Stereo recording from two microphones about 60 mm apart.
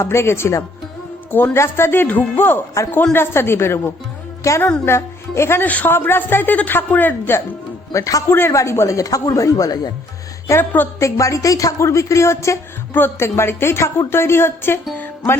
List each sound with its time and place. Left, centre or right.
0.0 s a man's voice: left
2.8 s speech: left
3.1 s a man's voice: left
4.4 s speech: left
5.6 s speech: left
7.9 s speech: left
8.3 s a man's voice: left
9.0 s speech: left
10.6 s speech: left
11.0 s a man's voice: left